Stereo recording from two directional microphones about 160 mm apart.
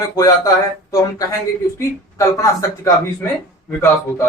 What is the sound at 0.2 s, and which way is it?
Speech, 20° left (ahead or behind).